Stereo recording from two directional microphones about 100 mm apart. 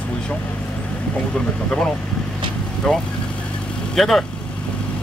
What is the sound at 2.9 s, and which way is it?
Speech, 5° left (ahead or behind).